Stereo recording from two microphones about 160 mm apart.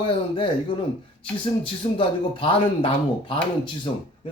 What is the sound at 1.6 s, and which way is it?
Speech, 30° left (ahead or behind).